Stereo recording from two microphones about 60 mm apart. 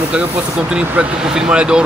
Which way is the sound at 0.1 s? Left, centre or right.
Centre.